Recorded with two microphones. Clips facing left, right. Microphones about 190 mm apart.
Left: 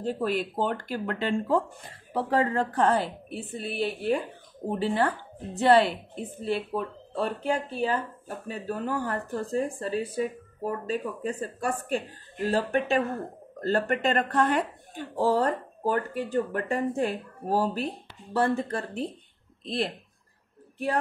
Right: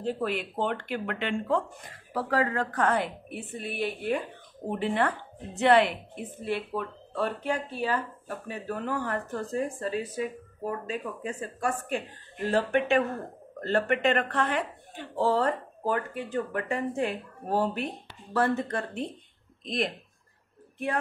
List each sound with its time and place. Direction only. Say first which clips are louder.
0.0 s speech: left 2 dB; 40° left (ahead or behind)